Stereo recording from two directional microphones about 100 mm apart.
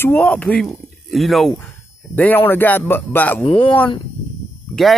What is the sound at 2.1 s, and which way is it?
Speech, 15° left (ahead or behind).